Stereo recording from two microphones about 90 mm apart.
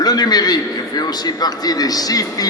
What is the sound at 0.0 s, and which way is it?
A man's voice, 45° left (ahead or behind).